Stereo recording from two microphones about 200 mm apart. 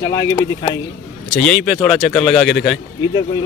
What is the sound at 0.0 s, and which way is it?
Speech, 15° left (ahead or behind).